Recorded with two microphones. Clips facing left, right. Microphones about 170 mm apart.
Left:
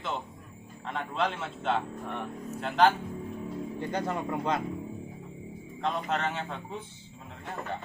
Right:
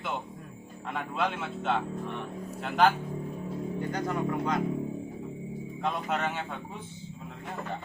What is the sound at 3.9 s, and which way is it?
Speech, 30° left (ahead or behind).